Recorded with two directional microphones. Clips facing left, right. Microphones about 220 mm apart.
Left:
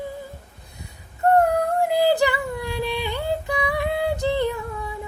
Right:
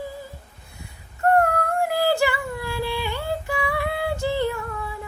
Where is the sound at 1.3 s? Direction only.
20° left (ahead or behind).